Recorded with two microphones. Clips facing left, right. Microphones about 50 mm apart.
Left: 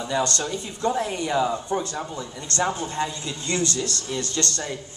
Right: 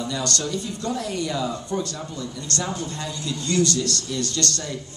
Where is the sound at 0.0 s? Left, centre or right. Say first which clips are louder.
Left 2 dB; left.